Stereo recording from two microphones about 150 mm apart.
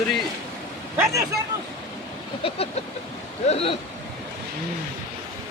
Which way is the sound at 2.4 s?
40° left (ahead or behind).